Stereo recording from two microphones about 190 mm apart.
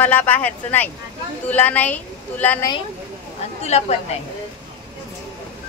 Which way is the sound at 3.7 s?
35° left (ahead or behind).